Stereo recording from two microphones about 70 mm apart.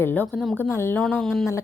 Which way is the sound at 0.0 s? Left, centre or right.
Left.